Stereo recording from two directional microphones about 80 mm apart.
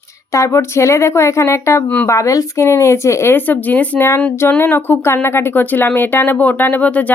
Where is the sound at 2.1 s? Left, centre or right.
Left.